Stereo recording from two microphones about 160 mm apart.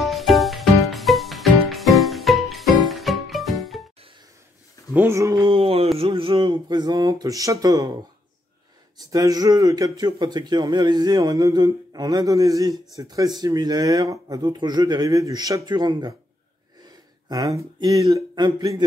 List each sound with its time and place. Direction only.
0.0 s music: centre (ahead or behind)
4.9 s speech: 15° right (ahead or behind)
5.5 s a sound: 35° right (ahead or behind)
5.9 s speech: 35° right (ahead or behind)
9.1 s speech: 20° right (ahead or behind)